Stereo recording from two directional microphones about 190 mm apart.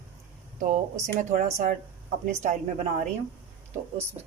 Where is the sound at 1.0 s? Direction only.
40° right (ahead or behind).